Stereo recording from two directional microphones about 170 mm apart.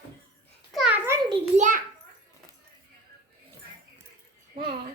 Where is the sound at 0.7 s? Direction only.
5° right (ahead or behind).